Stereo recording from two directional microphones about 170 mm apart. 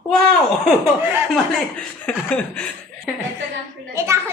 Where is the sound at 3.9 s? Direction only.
15° right (ahead or behind).